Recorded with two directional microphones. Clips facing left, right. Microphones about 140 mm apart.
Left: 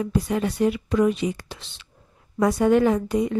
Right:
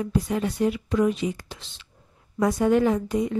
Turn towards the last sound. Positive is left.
turn(degrees=70)  # may be behind; listen again after turning